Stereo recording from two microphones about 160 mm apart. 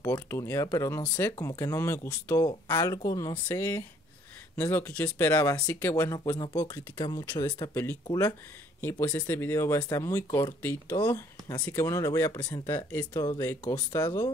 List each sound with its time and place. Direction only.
0.0 s speech: 20° left (ahead or behind)
13.0 s speech: 25° left (ahead or behind)
13.4 s speech: 10° left (ahead or behind)
13.7 s speech: 25° left (ahead or behind)